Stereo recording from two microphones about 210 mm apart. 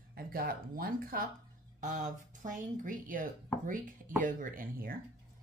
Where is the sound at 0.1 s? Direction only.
45° right (ahead or behind).